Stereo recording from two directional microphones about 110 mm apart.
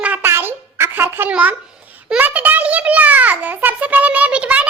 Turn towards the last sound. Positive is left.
turn(degrees=-10)  # may be behind; listen again after turning